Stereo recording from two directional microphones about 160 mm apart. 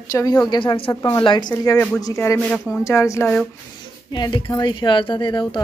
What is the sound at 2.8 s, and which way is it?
Speech, 20° left (ahead or behind).